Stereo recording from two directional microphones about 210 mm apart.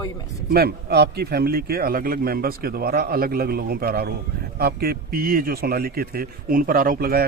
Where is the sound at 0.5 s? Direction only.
50° right (ahead or behind).